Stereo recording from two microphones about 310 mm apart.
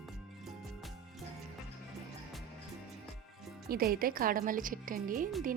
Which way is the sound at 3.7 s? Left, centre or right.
Right.